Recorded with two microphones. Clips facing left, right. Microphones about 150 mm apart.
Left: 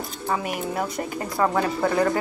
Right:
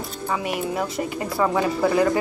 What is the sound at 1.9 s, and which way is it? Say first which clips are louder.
Speech: right 2 dB; 15° right (ahead or behind).